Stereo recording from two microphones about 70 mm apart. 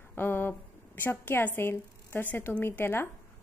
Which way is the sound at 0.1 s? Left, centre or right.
Left.